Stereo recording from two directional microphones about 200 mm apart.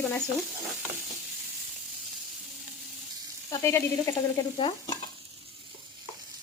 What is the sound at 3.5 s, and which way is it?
Stir, 15° left (ahead or behind).